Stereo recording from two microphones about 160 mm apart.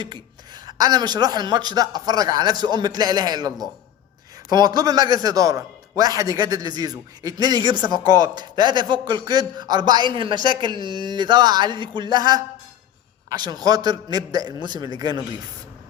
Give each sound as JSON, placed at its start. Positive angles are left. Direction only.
{"t": 0.7, "sound": "a man's voice", "side_deg": -25}